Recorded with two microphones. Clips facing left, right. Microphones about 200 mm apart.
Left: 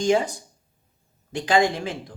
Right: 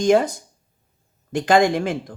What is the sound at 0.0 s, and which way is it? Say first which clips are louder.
Speech: right 4 dB; 55° right (ahead or behind).